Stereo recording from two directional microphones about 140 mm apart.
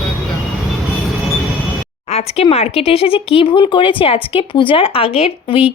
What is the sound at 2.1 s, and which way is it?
Speech, 50° left (ahead or behind).